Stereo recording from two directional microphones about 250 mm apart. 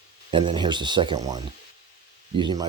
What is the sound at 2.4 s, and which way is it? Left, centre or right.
Speech, centre.